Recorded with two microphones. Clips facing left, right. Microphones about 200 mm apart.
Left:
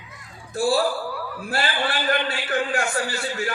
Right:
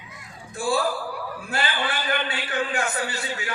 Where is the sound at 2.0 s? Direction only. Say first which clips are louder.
Left 4 dB; 40° left (ahead or behind).